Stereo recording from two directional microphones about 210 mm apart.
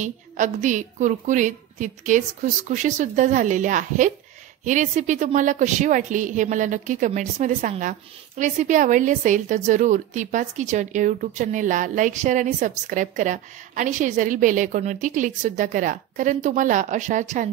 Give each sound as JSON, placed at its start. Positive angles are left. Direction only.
{"t": 0.0, "sound": "a woman's voice", "side_deg": -35}